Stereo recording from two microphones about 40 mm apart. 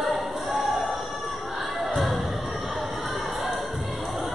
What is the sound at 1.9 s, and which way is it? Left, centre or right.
Music, centre.